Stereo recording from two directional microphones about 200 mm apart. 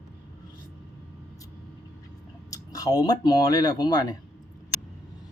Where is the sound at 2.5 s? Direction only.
20° left (ahead or behind).